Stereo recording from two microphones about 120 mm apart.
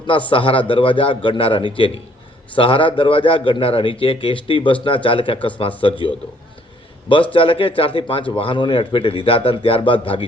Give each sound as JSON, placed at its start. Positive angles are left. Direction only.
{"t": 0.3, "sound": "a man's voice", "side_deg": 50}
{"t": 7.3, "sound": "a man's voice", "side_deg": 50}